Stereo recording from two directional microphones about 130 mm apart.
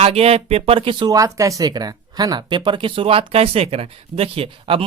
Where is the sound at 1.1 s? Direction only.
25° right (ahead or behind); by 4.8 s 45° right (ahead or behind).